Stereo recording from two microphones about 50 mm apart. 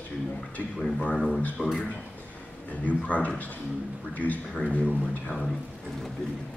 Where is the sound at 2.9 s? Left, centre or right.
Left.